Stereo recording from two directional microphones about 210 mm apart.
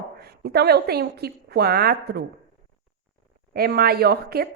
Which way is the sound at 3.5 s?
45° right (ahead or behind).